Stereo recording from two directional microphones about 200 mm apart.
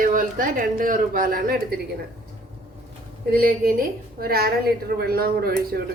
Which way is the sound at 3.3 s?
50° right (ahead or behind).